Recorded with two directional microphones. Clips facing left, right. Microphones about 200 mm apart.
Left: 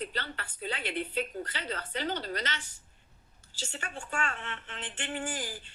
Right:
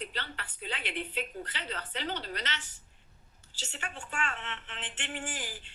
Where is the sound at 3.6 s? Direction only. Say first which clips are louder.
Left 2 dB; 45° left (ahead or behind).